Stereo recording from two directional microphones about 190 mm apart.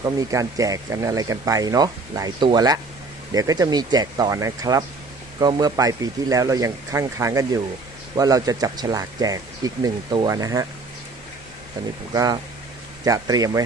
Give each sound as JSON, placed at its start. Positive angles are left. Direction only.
{"t": 0.0, "sound": "speech", "side_deg": -15}
{"t": 12.1, "sound": "speech", "side_deg": -20}